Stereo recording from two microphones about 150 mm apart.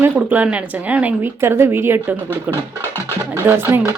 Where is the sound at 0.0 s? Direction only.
10° right (ahead or behind).